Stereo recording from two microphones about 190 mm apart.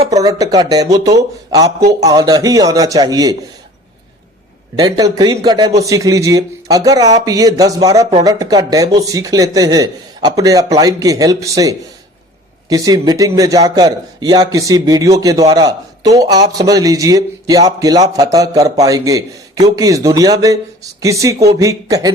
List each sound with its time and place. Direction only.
0.1 s a man's voice: 20° right (ahead or behind)
4.8 s a man's voice: 20° right (ahead or behind)